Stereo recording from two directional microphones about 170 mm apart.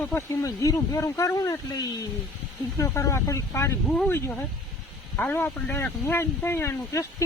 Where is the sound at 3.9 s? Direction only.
5° left (ahead or behind).